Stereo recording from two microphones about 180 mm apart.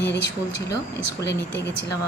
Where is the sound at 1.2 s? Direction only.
75° left (ahead or behind).